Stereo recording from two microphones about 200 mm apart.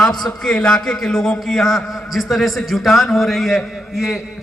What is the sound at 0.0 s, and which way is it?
A man's voice, centre (ahead or behind).